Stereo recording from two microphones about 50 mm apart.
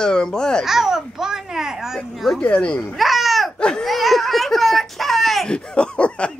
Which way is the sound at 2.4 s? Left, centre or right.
Left.